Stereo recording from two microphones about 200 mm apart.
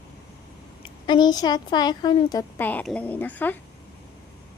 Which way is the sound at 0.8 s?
20° left (ahead or behind).